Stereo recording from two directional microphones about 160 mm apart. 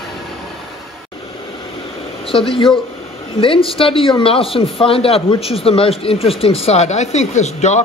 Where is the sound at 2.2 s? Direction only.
35° left (ahead or behind).